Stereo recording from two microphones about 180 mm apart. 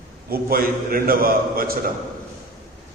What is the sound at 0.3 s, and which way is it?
A man's voice, 55° right (ahead or behind).